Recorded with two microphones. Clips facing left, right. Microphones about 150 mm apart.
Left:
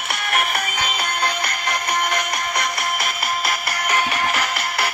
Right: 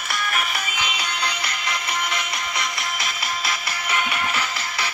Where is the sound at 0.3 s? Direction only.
55° left (ahead or behind).